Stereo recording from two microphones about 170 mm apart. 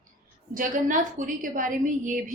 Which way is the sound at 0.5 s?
55° right (ahead or behind).